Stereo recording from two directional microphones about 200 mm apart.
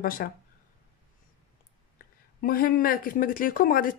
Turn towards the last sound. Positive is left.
turn(degrees=45)  # may be behind; listen again after turning